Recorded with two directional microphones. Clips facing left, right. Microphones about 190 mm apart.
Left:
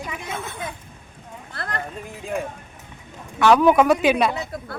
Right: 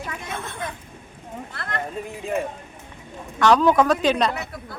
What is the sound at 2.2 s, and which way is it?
Speech, centre (ahead or behind).